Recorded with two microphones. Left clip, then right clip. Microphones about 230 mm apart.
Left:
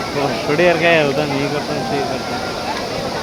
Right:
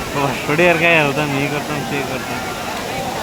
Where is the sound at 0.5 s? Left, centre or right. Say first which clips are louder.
Even; right.